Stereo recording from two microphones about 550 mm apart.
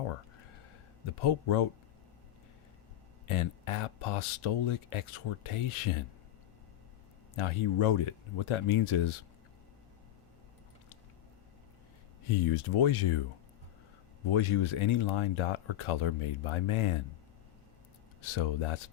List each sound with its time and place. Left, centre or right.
1.2 s speech: left
3.2 s speech: left
7.3 s speech: left
12.3 s speech: left
14.3 s speech: left
18.2 s speech: left